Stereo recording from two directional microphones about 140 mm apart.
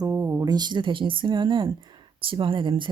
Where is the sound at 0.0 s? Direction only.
25° right (ahead or behind).